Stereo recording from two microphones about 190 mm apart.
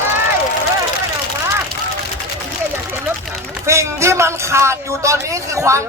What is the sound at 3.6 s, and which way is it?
A man's voice, 15° right (ahead or behind).